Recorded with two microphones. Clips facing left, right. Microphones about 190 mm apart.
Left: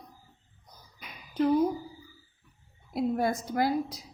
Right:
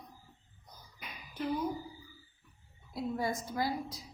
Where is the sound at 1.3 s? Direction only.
60° left (ahead or behind).